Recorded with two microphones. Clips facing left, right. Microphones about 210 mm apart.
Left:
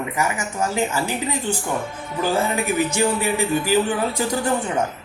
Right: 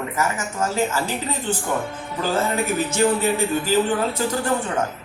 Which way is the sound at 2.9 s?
15° left (ahead or behind).